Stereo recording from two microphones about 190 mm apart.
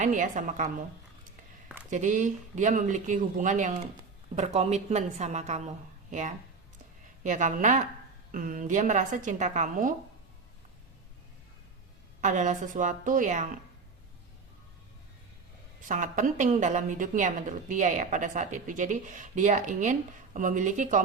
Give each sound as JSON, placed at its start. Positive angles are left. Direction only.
{"t": 0.0, "sound": "a woman's voice", "side_deg": -40}
{"t": 1.9, "sound": "a woman's voice", "side_deg": -40}
{"t": 12.2, "sound": "a woman's voice", "side_deg": -40}
{"t": 15.9, "sound": "a woman's voice", "side_deg": -45}